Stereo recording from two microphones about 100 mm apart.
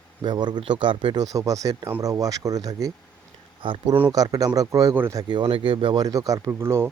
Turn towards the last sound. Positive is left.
turn(degrees=-25)  # may be behind; listen again after turning